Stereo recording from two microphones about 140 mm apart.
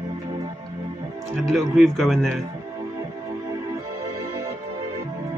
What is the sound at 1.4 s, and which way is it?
Speech, centre (ahead or behind).